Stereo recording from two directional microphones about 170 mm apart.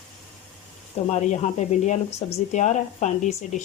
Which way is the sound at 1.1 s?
40° left (ahead or behind).